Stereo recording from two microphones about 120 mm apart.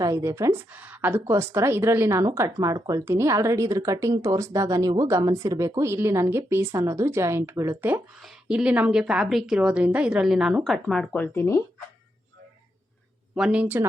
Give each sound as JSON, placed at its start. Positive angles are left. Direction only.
{"t": 0.0, "sound": "speech", "side_deg": -25}
{"t": 0.7, "sound": "speech", "side_deg": -15}
{"t": 8.2, "sound": "a woman's voice", "side_deg": -5}
{"t": 11.2, "sound": "speech", "side_deg": 20}
{"t": 13.3, "sound": "speech", "side_deg": -5}